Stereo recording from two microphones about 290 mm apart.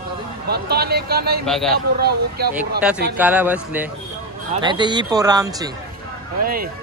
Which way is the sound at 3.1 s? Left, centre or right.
Centre.